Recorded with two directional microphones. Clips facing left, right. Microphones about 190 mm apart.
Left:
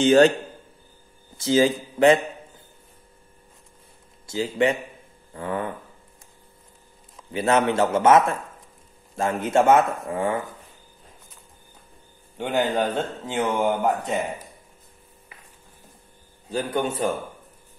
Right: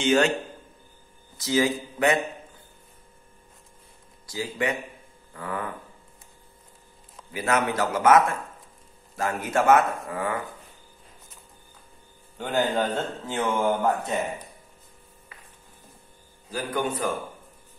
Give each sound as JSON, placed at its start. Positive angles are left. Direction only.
{"t": 0.0, "sound": "a man's voice", "side_deg": 35}
{"t": 1.4, "sound": "speech", "side_deg": 25}
{"t": 4.3, "sound": "speech", "side_deg": 25}
{"t": 7.3, "sound": "speech", "side_deg": 25}
{"t": 12.4, "sound": "a man's voice", "side_deg": 15}
{"t": 16.4, "sound": "speech", "side_deg": 25}